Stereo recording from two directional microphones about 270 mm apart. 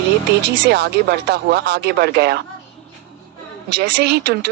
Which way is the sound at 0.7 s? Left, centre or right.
Right.